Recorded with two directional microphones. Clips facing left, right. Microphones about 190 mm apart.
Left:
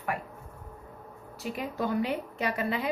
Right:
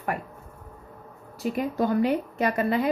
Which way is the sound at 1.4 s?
45° right (ahead or behind).